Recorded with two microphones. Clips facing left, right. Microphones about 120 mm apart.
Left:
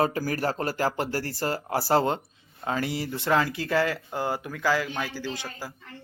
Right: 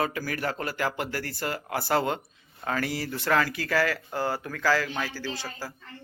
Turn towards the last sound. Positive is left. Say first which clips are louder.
# even
turn(degrees=15)  # may be behind; listen again after turning